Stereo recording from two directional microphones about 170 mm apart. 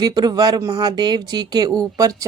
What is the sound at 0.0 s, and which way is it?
Speech, 25° right (ahead or behind).